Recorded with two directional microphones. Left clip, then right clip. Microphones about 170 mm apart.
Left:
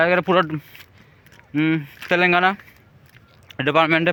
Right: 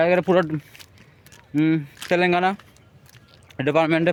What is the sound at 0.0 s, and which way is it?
Fowl, 15° right (ahead or behind).